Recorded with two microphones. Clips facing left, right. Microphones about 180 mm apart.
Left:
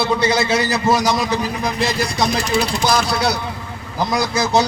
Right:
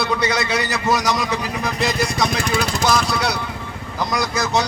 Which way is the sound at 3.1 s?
30° left (ahead or behind).